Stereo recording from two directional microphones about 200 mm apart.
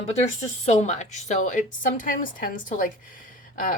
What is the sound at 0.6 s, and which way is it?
Speech, 35° left (ahead or behind).